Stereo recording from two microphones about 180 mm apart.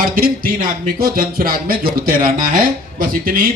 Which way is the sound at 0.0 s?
55° right (ahead or behind).